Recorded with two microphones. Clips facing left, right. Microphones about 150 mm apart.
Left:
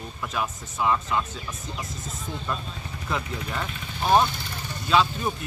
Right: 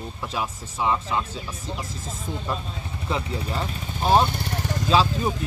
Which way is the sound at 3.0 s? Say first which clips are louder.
Right 3 dB; 30° right (ahead or behind).